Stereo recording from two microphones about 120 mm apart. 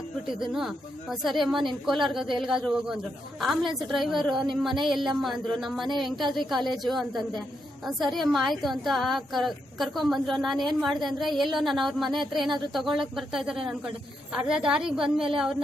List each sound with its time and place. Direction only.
0.4 s a woman's voice: 5° right (ahead or behind)
12.8 s speech: 45° right (ahead or behind)
13.1 s a woman's voice: 5° right (ahead or behind)